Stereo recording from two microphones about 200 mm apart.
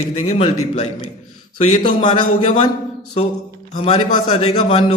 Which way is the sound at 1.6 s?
25° left (ahead or behind).